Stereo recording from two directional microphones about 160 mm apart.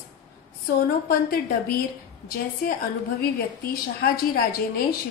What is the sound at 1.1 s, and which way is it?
Speech, 70° left (ahead or behind).